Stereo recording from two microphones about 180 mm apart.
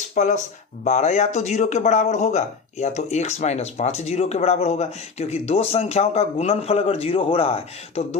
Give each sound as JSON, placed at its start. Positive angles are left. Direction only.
{"t": 0.1, "sound": "speech", "side_deg": 40}